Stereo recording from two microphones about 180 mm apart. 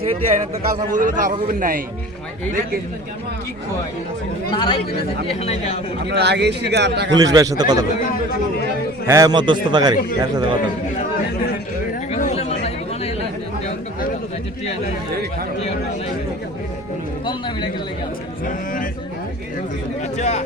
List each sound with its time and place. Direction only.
0.9 s a man's voice: 45° right (ahead or behind)
4.5 s speech: 30° left (ahead or behind)
6.1 s a man's voice: 70° right (ahead or behind)
7.2 s a man's voice: 20° right (ahead or behind)
9.0 s a man's voice: 20° right (ahead or behind)
12.1 s chatter: 35° left (ahead or behind)
18.4 s a sound: 50° left (ahead or behind)
20.1 s speech: 40° left (ahead or behind)